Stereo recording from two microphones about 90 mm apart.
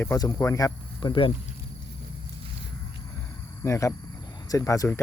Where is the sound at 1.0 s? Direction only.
55° left (ahead or behind).